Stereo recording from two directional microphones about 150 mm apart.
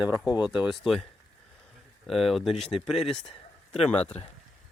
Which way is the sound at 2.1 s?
Centre (ahead or behind).